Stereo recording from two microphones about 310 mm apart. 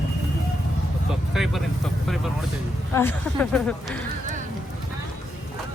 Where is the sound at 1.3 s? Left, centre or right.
Centre.